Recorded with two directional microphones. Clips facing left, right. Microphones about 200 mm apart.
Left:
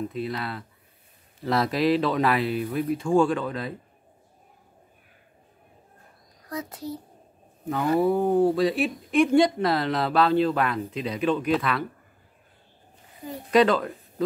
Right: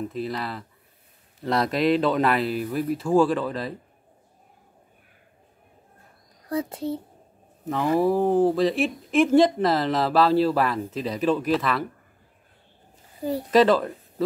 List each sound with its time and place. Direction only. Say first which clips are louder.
0.1 s a woman's voice: right 1 dB; centre (ahead or behind)
6.5 s a child's voice: right 6 dB; 30° right (ahead or behind)
7.6 s a woman's voice: right 1 dB; centre (ahead or behind)
13.2 s speech: right 9 dB; 35° right (ahead or behind)
13.5 s speech: right 1 dB; centre (ahead or behind)